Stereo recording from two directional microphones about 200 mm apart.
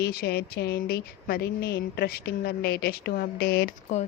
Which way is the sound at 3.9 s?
35° left (ahead or behind).